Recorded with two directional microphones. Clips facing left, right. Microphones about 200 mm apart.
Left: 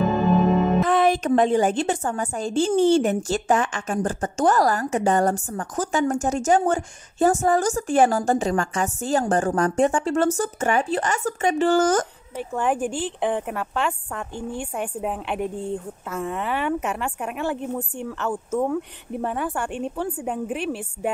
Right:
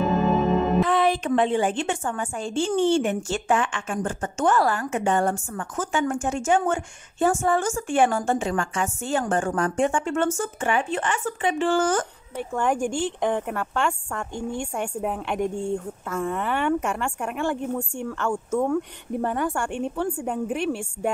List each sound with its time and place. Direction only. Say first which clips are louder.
0.1 s music: left 2 dB; centre (ahead or behind)
0.8 s a woman's voice: left 2 dB; 45° left (ahead or behind)
12.4 s a woman's voice: even; 5° left (ahead or behind)